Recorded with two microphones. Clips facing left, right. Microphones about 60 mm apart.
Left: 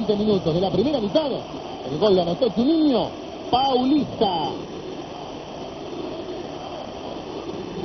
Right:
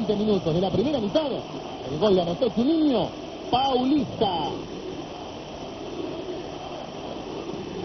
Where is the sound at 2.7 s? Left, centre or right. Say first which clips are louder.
Left 3 dB; left.